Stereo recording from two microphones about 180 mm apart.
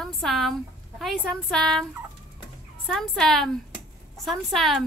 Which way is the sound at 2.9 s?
Centre (ahead or behind).